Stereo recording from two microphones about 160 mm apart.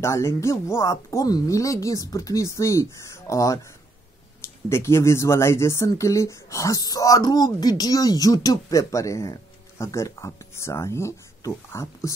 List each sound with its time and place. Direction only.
0.0 s speech: 15° left (ahead or behind)